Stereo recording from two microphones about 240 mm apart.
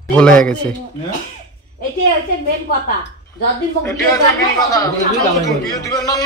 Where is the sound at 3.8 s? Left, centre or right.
Centre.